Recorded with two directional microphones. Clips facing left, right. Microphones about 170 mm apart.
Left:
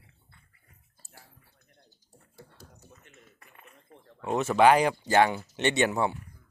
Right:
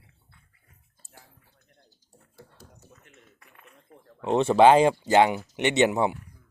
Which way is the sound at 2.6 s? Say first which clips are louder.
Right 1 dB; 5° right (ahead or behind).